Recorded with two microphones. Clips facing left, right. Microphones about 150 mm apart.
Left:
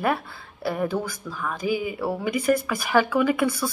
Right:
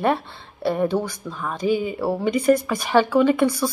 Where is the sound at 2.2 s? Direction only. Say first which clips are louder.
Right 5 dB; 25° right (ahead or behind).